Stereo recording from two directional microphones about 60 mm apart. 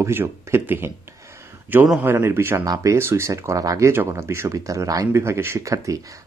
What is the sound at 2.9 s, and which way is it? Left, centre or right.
Speech, right.